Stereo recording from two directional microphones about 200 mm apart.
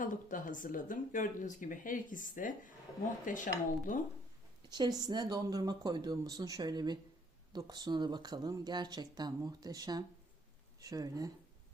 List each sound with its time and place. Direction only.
0.0 s speech: 40° left (ahead or behind)
4.7 s speech: 20° right (ahead or behind)